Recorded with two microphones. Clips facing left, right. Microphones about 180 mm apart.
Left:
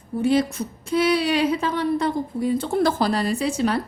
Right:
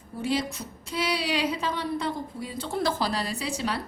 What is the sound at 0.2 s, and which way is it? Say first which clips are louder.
Speech: left 8 dB; 50° left (ahead or behind).